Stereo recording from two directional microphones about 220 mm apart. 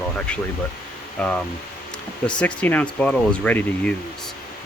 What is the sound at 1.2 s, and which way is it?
Speech, 5° left (ahead or behind).